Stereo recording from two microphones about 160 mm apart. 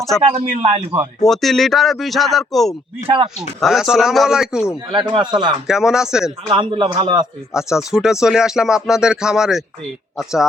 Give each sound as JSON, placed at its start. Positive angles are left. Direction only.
{"t": 0.2, "sound": "a man's voice", "side_deg": -35}
{"t": 1.2, "sound": "speech", "side_deg": 0}
{"t": 4.9, "sound": "a man's voice", "side_deg": -30}
{"t": 5.6, "sound": "speech", "side_deg": -5}
{"t": 6.5, "sound": "a man's voice", "side_deg": -30}
{"t": 7.5, "sound": "speech", "side_deg": -5}